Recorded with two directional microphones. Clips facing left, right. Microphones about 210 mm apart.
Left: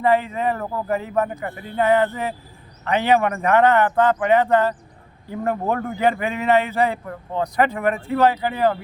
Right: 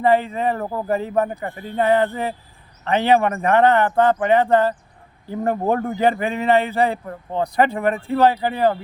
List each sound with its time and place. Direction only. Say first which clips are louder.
0.0 s a man's voice: right 1 dB; 30° right (ahead or behind)